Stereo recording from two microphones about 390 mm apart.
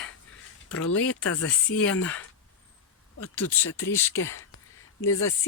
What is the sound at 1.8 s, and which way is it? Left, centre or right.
Speech, centre.